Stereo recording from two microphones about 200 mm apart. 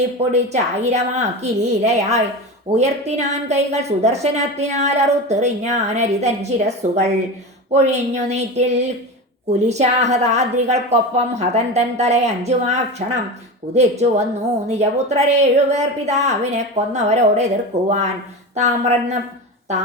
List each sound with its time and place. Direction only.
0.2 s a woman's voice: 35° right (ahead or behind)